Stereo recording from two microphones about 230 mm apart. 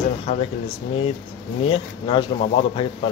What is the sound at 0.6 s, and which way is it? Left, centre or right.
Speech, left.